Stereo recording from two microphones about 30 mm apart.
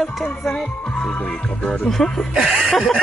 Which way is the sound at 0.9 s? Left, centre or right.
Left.